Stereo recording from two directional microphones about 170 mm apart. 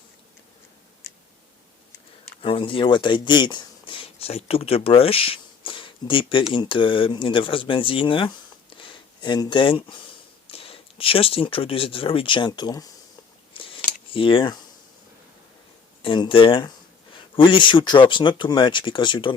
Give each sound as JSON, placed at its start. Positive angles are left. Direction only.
{"t": 2.4, "sound": "speech", "side_deg": 30}
{"t": 13.5, "sound": "scissors", "side_deg": 30}
{"t": 16.0, "sound": "speech", "side_deg": 30}